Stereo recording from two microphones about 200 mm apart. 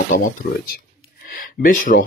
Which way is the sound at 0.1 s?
40° left (ahead or behind).